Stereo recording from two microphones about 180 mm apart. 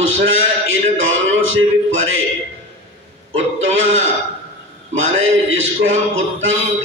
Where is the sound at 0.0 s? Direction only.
90° right.